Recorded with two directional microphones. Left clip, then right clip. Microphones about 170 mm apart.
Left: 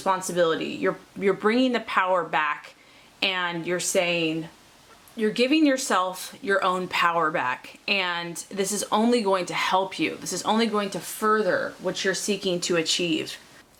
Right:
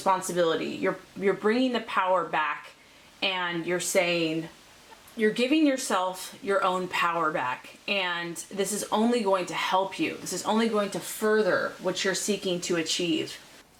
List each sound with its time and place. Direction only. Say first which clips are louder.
0.0 s speech: left 2 dB; 25° left (ahead or behind)
5.4 s speech: left 6 dB; 30° left (ahead or behind)